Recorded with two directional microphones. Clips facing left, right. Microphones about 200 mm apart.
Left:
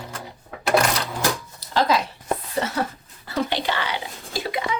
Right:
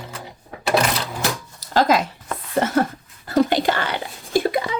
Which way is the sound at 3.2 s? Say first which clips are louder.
Right 7 dB; 45° right (ahead or behind).